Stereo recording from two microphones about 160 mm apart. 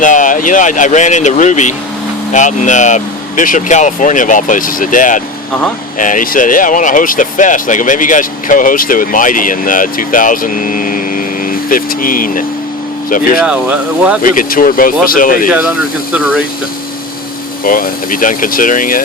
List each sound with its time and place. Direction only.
0.0 s speech: 55° left (ahead or behind)
13.4 s speech: 5° right (ahead or behind)
14.2 s speech: 55° left (ahead or behind)
15.4 s speech: 5° right (ahead or behind)
17.6 s speech: 60° left (ahead or behind)